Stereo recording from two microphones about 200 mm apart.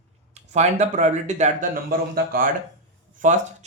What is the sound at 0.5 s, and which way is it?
Speech, 35° right (ahead or behind).